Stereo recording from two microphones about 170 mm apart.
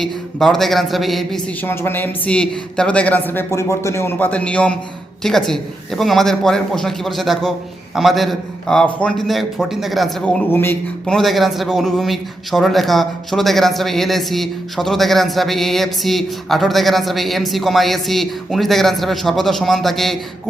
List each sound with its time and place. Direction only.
0.0 s a man's voice: centre (ahead or behind)
1.6 s a man's voice: 10° left (ahead or behind)